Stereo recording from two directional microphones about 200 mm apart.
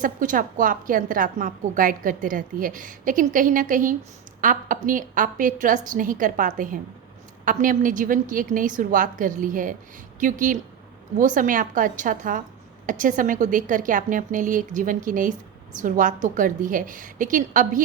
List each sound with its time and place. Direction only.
0.0 s a woman's voice: 40° right (ahead or behind)